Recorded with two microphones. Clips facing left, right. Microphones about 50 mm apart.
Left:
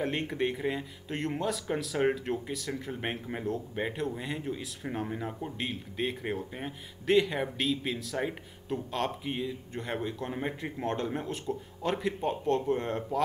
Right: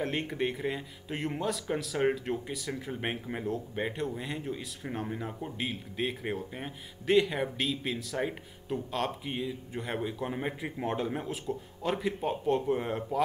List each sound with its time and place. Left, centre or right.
0.0 s speech: centre